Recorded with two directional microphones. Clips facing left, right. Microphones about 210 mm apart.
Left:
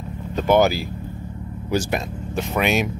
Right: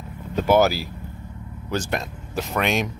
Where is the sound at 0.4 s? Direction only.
5° right (ahead or behind).